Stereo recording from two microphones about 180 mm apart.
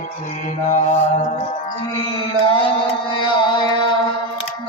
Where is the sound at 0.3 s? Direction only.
40° left (ahead or behind).